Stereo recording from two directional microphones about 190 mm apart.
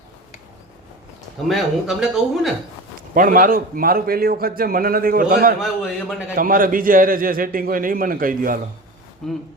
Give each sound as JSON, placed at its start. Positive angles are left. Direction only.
{"t": 1.5, "sound": "speech", "side_deg": 0}
{"t": 3.2, "sound": "a man's voice", "side_deg": -45}
{"t": 5.8, "sound": "speech", "side_deg": -5}
{"t": 6.3, "sound": "a man's voice", "side_deg": -45}
{"t": 9.2, "sound": "speech", "side_deg": 0}